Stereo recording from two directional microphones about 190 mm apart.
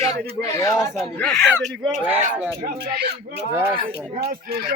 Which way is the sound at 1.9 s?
35° right (ahead or behind).